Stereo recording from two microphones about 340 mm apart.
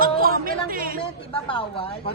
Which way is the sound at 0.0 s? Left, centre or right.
Right.